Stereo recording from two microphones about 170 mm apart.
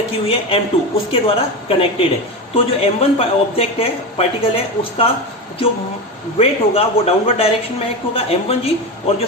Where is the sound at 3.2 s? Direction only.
35° left (ahead or behind).